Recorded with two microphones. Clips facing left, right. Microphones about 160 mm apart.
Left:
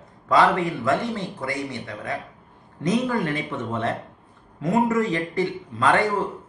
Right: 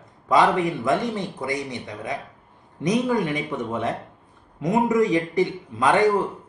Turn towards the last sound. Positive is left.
turn(degrees=-15)  # may be behind; listen again after turning